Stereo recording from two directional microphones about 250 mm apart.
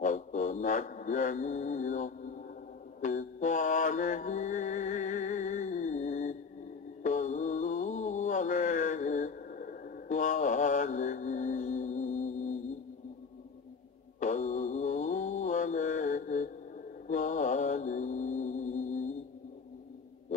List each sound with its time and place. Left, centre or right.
0.0 s mantra: left
14.2 s mantra: left